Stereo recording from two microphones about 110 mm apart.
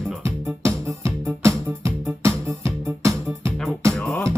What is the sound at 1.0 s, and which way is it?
Music, 25° right (ahead or behind).